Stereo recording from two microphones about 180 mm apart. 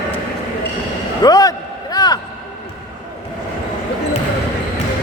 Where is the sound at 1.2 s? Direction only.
20° left (ahead or behind).